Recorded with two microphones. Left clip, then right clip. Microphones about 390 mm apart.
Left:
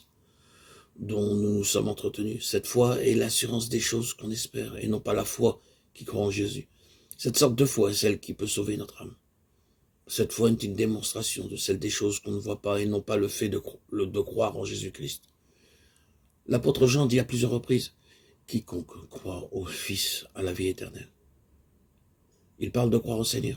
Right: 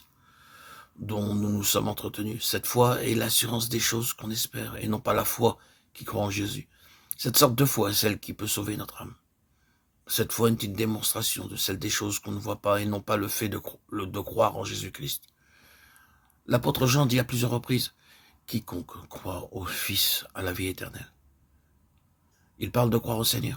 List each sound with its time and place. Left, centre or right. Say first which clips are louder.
0.4 s speech: right 7 dB; right
16.5 s speech: left 2 dB; right
22.6 s speech: even; right